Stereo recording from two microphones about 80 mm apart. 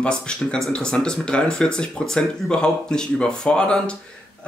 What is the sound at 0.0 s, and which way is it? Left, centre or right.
Speech, centre.